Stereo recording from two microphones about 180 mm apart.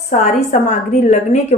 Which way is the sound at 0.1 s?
40° left (ahead or behind).